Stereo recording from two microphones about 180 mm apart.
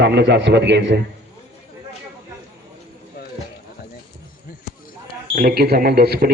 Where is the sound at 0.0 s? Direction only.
70° right (ahead or behind).